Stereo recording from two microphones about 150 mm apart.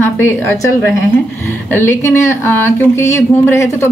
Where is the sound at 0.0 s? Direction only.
15° left (ahead or behind).